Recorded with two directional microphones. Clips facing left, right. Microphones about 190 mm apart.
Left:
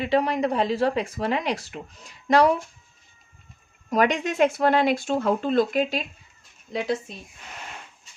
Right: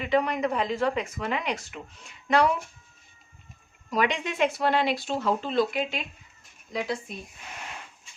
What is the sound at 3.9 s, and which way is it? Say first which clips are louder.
Speech: left 5 dB; 45° left (ahead or behind).